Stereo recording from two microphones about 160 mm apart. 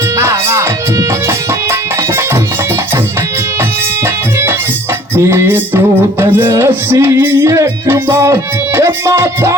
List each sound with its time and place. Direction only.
0.2 s music: 15° right (ahead or behind)
4.0 s music: 15° right (ahead or behind)